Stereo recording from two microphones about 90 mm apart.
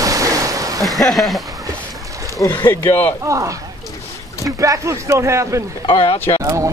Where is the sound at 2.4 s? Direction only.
50° left (ahead or behind).